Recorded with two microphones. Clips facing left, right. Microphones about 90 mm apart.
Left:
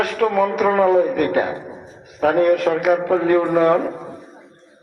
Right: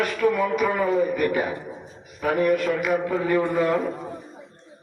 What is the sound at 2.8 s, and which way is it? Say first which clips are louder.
Speech: left 7 dB; 55° left (ahead or behind).